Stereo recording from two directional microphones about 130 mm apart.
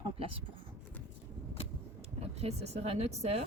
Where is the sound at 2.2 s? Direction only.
55° right (ahead or behind).